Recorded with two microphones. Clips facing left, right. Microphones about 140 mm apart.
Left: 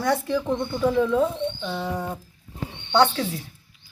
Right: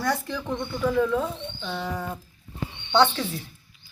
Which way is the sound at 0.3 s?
15° left (ahead or behind).